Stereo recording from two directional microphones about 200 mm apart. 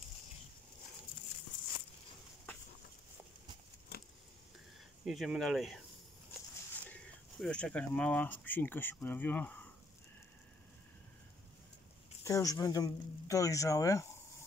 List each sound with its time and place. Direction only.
5.0 s speech: centre (ahead or behind)
7.3 s speech: 5° left (ahead or behind)
12.2 s speech: 15° left (ahead or behind)